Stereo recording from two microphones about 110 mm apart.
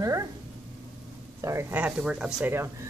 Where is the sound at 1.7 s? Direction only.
10° right (ahead or behind).